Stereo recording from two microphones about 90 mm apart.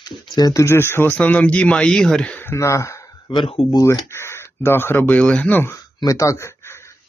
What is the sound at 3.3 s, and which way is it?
Speech, 55° left (ahead or behind).